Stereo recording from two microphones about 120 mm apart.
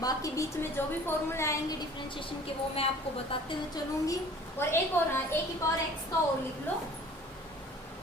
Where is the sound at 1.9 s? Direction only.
45° left (ahead or behind).